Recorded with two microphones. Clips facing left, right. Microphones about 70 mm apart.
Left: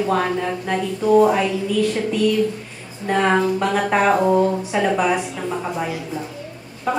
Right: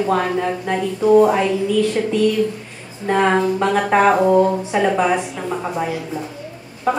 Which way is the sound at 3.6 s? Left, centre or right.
Centre.